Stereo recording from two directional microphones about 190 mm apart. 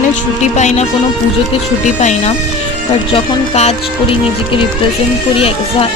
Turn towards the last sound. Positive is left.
turn(degrees=30)  # may be behind; listen again after turning